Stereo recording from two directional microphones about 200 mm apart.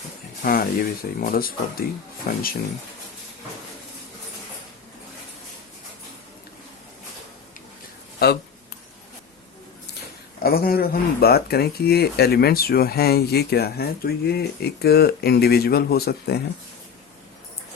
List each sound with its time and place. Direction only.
0.4 s speech: 45° left (ahead or behind)
8.2 s speech: 50° left (ahead or behind)
10.4 s speech: 50° left (ahead or behind)